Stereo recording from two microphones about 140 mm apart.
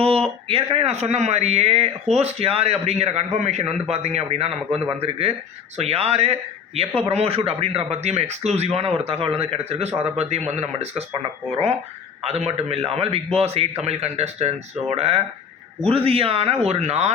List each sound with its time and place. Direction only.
0.4 s speech: 45° right (ahead or behind)